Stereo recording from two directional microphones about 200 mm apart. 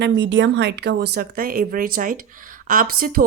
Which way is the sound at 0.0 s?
65° right (ahead or behind).